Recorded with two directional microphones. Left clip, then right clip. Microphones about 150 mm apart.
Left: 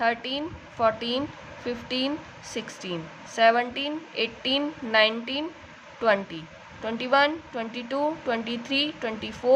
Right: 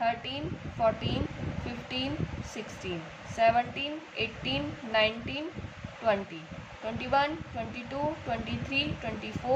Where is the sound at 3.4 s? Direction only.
50° left (ahead or behind).